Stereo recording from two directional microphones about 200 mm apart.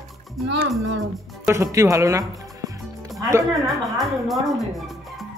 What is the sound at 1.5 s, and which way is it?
Speech, 15° right (ahead or behind).